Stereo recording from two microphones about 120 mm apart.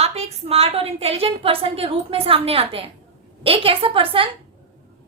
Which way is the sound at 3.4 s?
50° right (ahead or behind).